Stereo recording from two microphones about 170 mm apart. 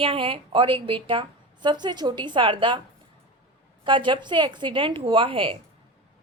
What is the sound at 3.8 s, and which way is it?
A woman's voice, 30° right (ahead or behind).